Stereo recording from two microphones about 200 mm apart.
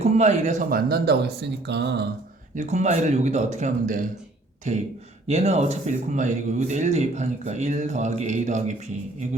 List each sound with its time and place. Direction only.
0.0 s speech: 35° right (ahead or behind); by 2.0 s 55° right (ahead or behind)
2.6 s speech: 35° right (ahead or behind)